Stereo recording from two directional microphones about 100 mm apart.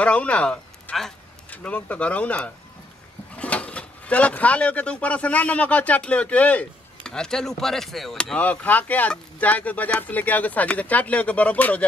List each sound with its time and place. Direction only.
0.0 s speech: 10° left (ahead or behind)
8.4 s speech: 15° left (ahead or behind)